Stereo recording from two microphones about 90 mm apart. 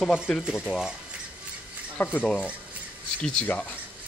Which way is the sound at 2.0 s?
20° left (ahead or behind).